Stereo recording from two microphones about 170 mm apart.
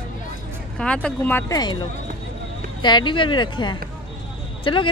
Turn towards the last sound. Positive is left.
turn(degrees=30)  # may be behind; listen again after turning